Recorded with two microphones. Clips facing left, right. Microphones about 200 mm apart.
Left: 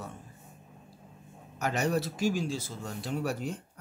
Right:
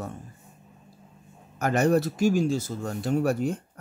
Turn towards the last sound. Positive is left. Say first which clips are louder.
# right 8 dB
turn(degrees=-50)  # may be behind; listen again after turning